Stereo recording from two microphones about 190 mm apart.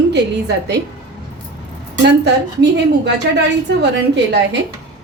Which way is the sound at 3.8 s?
65° right (ahead or behind).